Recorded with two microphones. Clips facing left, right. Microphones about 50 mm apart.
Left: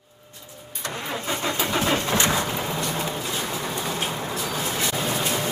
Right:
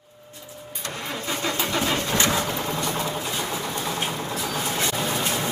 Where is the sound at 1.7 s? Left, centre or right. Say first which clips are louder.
Left 2 dB; left.